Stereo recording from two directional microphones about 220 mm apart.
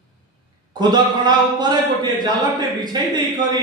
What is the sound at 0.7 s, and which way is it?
A man's voice, 20° right (ahead or behind).